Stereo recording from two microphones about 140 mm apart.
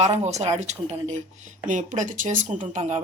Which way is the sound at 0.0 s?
55° right (ahead or behind).